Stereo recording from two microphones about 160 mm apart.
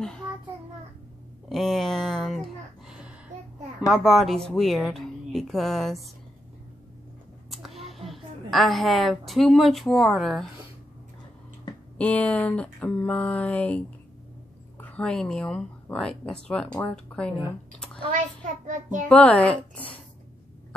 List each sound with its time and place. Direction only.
1.5 s speech: centre (ahead or behind)
7.5 s a woman's voice: centre (ahead or behind)
12.0 s speech: 10° left (ahead or behind)
17.7 s a sound: 5° left (ahead or behind)
18.7 s a child's voice: 55° right (ahead or behind)
19.0 s speech: 10° left (ahead or behind)